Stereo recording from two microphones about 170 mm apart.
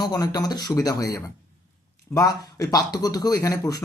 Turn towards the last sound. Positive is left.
turn(degrees=20)  # may be behind; listen again after turning